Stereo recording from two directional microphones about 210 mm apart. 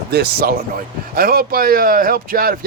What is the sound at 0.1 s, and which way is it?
Speech, 50° right (ahead or behind).